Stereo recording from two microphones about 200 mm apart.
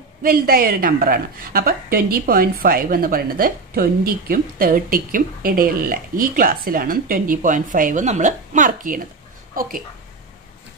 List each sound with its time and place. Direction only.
0.2 s a woman's voice: 45° right (ahead or behind)